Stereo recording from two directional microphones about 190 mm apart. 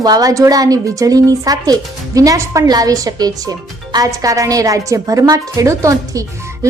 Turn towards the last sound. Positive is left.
turn(degrees=-15)  # may be behind; listen again after turning